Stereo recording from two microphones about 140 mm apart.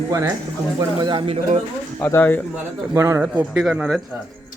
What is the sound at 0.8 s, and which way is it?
Speech, 30° right (ahead or behind).